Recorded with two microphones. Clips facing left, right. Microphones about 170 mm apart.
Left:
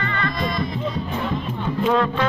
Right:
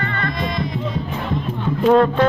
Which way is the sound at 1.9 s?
40° right (ahead or behind).